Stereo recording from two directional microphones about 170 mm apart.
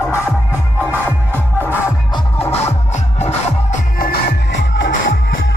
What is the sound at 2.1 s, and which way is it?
Music, 35° left (ahead or behind).